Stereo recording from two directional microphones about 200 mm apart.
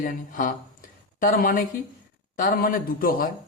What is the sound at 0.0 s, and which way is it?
A man's voice, 45° left (ahead or behind).